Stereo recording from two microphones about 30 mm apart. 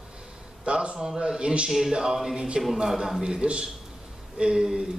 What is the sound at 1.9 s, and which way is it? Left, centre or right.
Speech, centre.